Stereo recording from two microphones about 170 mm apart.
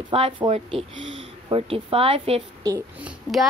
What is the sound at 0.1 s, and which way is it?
Speech, 35° right (ahead or behind).